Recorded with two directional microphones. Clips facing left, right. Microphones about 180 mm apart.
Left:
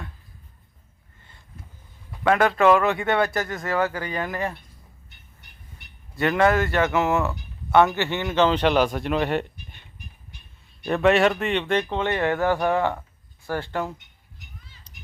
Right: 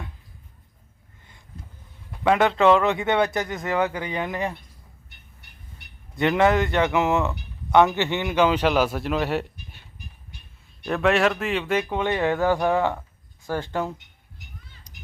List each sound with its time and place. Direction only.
2.2 s speech: 15° right (ahead or behind)
6.1 s a man's voice: 20° right (ahead or behind)
10.8 s a man's voice: centre (ahead or behind); by 13.9 s 15° right (ahead or behind)
14.9 s a sound: 10° right (ahead or behind)